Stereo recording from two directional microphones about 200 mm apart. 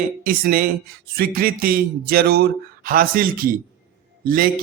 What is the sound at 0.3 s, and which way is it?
A man's voice, 45° right (ahead or behind).